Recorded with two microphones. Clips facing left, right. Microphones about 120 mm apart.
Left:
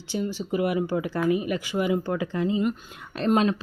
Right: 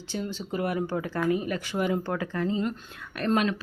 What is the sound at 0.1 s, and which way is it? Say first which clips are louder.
Speech: left 4 dB; 15° left (ahead or behind).